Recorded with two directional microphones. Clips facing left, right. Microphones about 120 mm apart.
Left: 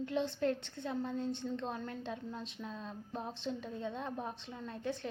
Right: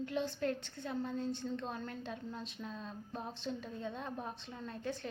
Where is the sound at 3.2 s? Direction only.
20° left (ahead or behind).